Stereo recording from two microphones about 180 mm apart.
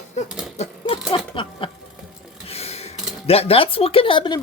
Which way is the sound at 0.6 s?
30° left (ahead or behind).